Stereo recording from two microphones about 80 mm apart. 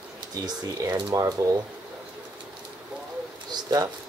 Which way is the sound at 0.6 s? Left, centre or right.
Right.